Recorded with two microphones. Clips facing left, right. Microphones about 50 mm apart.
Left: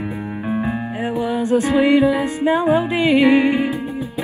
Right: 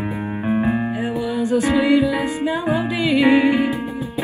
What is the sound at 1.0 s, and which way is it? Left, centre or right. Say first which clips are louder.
Music: left 1 dB; left.